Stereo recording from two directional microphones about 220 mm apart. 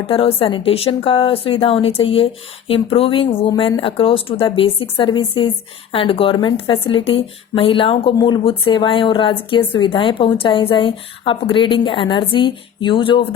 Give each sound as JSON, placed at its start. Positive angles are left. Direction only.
{"t": 0.1, "sound": "speech", "side_deg": 25}